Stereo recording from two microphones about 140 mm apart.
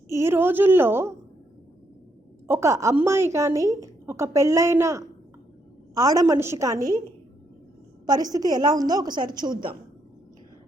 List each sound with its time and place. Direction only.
0.1 s a woman's voice: 15° right (ahead or behind)
2.5 s a woman's voice: 20° right (ahead or behind)
8.0 s a woman's voice: 25° right (ahead or behind)